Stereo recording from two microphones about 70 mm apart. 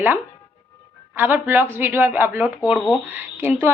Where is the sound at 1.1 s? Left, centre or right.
Right.